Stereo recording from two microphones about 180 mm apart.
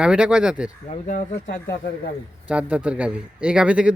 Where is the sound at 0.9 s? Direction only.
40° left (ahead or behind).